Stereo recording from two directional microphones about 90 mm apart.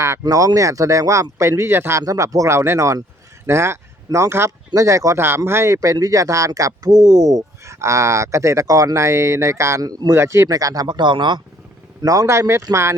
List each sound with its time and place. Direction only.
0.0 s speech: 35° right (ahead or behind)
2.0 s speech: 35° right (ahead or behind)
10.8 s speech: 55° right (ahead or behind)
12.0 s speech: 35° right (ahead or behind)